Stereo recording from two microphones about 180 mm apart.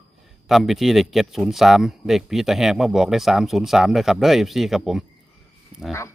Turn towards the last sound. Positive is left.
turn(degrees=0)  # may be behind; listen again after turning